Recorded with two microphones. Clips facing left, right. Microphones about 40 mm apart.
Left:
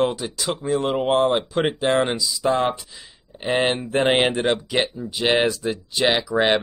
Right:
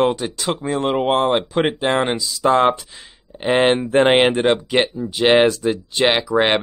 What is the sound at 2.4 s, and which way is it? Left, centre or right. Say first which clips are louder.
Speech: right 6 dB; right.